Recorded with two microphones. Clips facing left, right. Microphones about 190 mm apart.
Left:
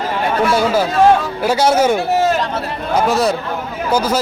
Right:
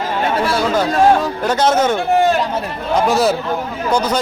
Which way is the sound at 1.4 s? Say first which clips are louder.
Left 1 dB; 10° left (ahead or behind).